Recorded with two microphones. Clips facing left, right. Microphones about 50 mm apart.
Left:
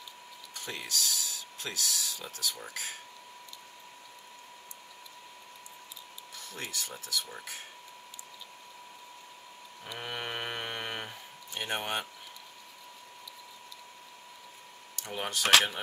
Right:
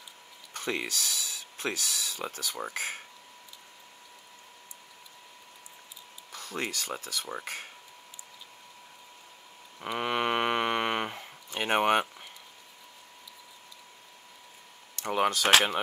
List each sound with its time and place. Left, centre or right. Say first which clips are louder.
0.6 s speech: right 5 dB; right
6.3 s speech: right 6 dB; right
9.8 s speech: right 9 dB; right
15.1 s speech: right 9 dB; right